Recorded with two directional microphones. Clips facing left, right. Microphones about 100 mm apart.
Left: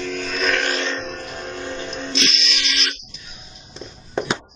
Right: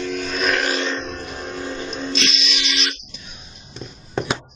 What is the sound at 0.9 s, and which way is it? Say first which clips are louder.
Music: even; 20° right (ahead or behind).